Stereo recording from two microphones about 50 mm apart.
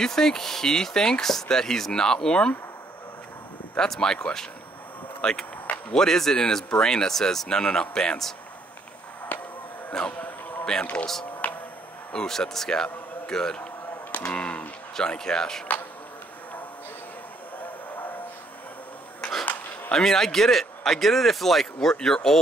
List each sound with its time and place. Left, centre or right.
0.0 s speech: centre
3.7 s speech: centre
9.3 s a sound: left
10.0 s a man's voice: centre
11.4 s music: left
12.1 s a man's voice: centre
19.9 s speech: centre